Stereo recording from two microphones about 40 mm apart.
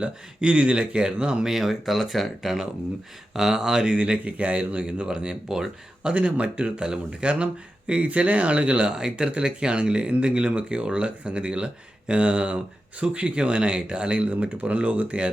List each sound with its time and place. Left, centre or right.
0.0 s speech: right
1.5 s speech: centre
3.3 s a sound: centre
3.8 s speech: right
5.5 s a sound: centre
6.1 s speech: right